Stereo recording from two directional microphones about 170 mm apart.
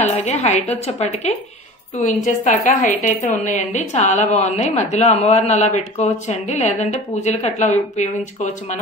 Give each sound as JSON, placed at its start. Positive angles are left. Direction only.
{"t": 0.0, "sound": "a woman's voice", "side_deg": 40}